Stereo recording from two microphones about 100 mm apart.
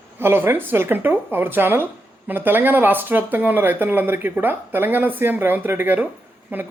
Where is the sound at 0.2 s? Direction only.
25° right (ahead or behind).